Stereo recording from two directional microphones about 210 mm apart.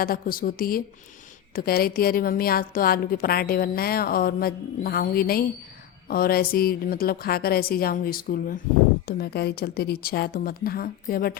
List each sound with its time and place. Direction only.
0.0 s a woman's voice: 45° left (ahead or behind)